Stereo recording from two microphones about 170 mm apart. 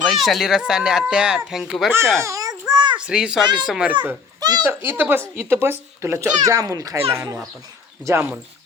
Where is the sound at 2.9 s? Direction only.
5° right (ahead or behind).